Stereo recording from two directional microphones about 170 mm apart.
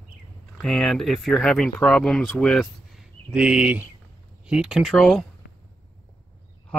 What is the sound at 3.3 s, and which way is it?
Speech, 5° right (ahead or behind).